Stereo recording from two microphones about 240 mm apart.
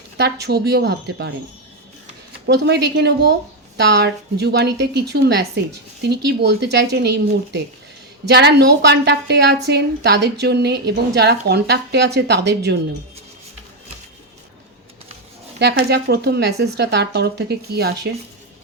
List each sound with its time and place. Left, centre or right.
0.2 s a woman's voice: right
2.5 s a woman's voice: right
15.5 s a woman's voice: right